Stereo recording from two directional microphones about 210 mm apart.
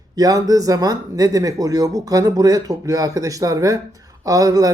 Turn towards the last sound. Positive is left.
turn(degrees=-15)  # may be behind; listen again after turning